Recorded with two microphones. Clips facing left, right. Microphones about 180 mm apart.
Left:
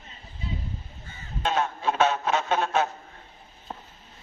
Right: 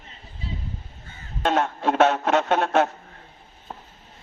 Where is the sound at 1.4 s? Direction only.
65° right (ahead or behind).